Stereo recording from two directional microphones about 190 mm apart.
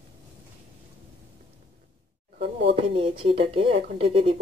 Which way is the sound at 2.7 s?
30° right (ahead or behind).